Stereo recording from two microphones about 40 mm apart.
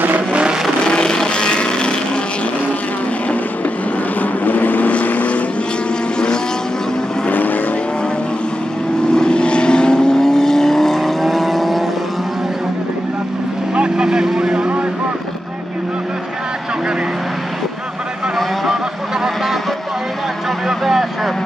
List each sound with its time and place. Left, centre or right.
0.3 s vehicle: right
0.8 s vehicle: left
4.2 s vehicle: left
6.1 s vehicle: left
7.2 s vehicle: left
9.1 s vehicle: left; by 11.8 s centre
13.7 s vehicle: centre
20.6 s vehicle: centre